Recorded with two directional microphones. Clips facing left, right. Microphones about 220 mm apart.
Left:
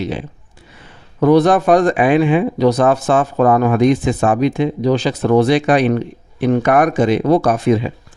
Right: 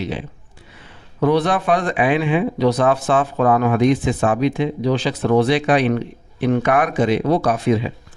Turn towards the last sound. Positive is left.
turn(degrees=45)  # may be behind; listen again after turning